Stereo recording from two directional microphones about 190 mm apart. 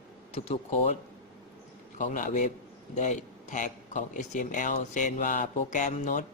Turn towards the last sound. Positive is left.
turn(degrees=40)  # may be behind; listen again after turning